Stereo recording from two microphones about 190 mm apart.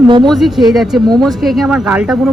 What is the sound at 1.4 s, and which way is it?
Speech, centre (ahead or behind).